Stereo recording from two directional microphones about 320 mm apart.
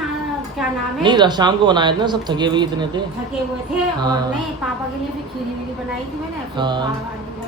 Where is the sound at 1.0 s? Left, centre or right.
Centre.